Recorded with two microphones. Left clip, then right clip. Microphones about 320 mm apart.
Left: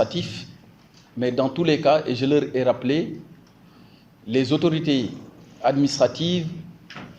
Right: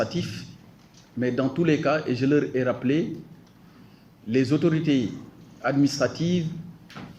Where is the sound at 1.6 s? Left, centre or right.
Centre.